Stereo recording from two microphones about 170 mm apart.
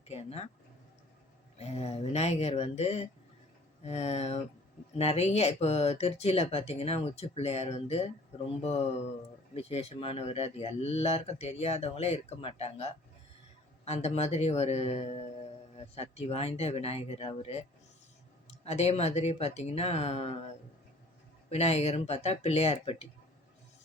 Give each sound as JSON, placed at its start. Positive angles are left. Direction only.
{"t": 0.1, "sound": "speech", "side_deg": 40}
{"t": 1.5, "sound": "speech", "side_deg": 40}
{"t": 21.5, "sound": "speech", "side_deg": 40}